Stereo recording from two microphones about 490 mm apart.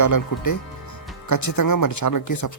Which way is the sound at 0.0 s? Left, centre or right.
Left.